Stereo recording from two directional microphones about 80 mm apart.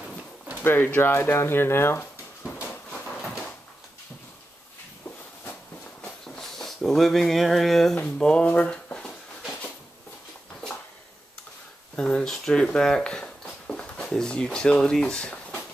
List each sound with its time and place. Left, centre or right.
0.7 s speech: left
2.9 s train: centre
6.0 s a sound: centre
8.0 s speech: centre
11.9 s speech: centre